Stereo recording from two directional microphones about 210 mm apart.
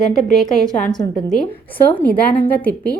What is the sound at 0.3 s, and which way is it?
Speech, centre (ahead or behind).